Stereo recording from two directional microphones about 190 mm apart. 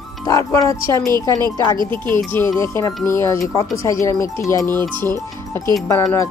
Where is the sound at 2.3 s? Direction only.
15° left (ahead or behind).